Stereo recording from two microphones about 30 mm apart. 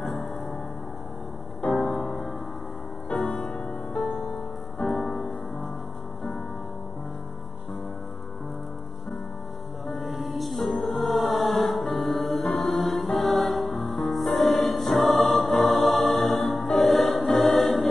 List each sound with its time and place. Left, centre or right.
0.0 s music: centre
1.6 s music: left
3.3 s music: centre
4.8 s music: centre
9.8 s music: centre
16.8 s choir: centre